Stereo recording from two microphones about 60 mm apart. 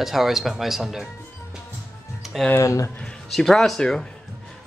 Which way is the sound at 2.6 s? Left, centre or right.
Left.